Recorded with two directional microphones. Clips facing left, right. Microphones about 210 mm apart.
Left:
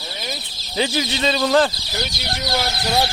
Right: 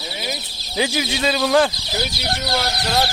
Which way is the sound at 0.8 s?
10° right (ahead or behind).